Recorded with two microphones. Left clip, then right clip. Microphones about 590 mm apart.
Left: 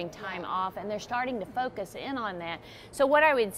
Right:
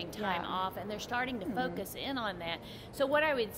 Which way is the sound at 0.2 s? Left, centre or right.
Left.